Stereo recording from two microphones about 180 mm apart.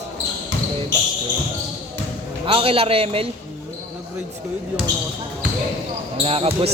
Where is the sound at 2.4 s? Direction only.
30° right (ahead or behind).